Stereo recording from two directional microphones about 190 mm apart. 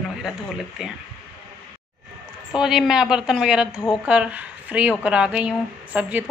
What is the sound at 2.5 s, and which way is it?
A woman's voice, 5° right (ahead or behind).